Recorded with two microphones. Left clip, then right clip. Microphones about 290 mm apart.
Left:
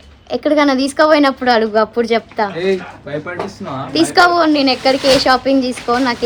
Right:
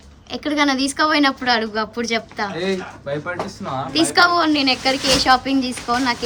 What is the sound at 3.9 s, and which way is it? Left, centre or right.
A woman's voice, centre.